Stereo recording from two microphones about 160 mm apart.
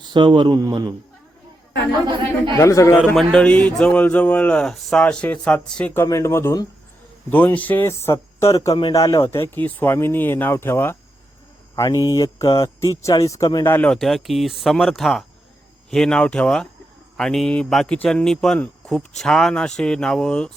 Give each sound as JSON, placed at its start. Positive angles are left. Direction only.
{"t": 0.0, "sound": "speech", "side_deg": -30}
{"t": 2.5, "sound": "speech", "side_deg": 20}
{"t": 3.2, "sound": "speech", "side_deg": 5}
{"t": 13.9, "sound": "speech", "side_deg": 0}